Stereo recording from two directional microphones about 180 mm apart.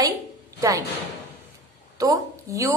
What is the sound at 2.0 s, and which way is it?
Speech, 20° right (ahead or behind).